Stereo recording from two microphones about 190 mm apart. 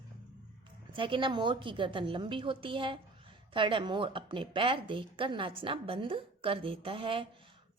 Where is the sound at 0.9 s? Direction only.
25° right (ahead or behind).